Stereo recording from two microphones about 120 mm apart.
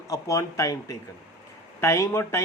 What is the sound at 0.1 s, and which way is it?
Speech, 25° left (ahead or behind).